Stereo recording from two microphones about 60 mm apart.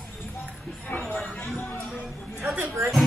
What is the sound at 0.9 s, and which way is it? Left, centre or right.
Music, left.